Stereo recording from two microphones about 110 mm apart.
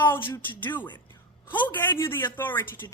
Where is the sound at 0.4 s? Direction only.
15° left (ahead or behind).